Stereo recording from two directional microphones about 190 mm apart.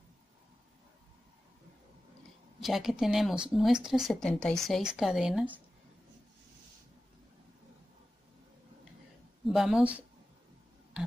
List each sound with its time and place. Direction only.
2.6 s a woman's voice: centre (ahead or behind)
9.5 s a woman's voice: centre (ahead or behind)